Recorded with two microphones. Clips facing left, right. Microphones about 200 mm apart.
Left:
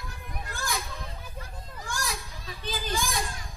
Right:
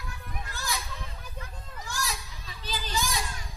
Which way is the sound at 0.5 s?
50° left (ahead or behind).